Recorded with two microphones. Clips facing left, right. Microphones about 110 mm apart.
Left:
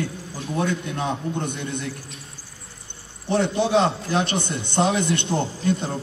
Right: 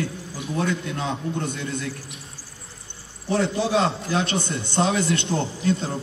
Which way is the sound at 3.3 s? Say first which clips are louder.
Left 2 dB; 25° left (ahead or behind).